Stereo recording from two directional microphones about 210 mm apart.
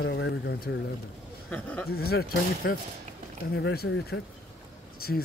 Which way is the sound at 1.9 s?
45° left (ahead or behind).